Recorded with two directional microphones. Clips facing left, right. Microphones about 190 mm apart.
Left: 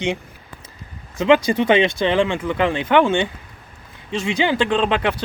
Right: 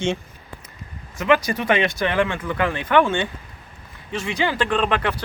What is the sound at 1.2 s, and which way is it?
Speech, 25° left (ahead or behind).